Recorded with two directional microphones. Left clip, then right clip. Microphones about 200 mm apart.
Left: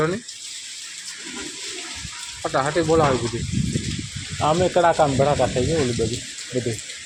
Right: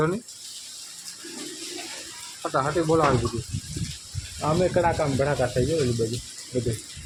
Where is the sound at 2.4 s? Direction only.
Centre (ahead or behind).